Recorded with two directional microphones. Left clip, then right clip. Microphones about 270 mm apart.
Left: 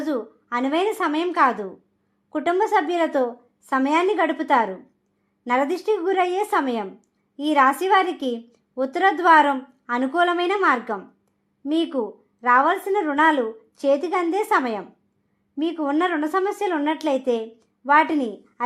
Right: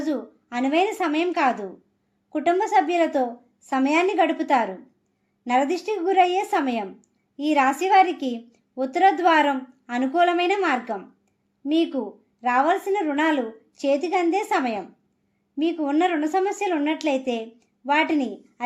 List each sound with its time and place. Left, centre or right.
0.0 s a woman's voice: left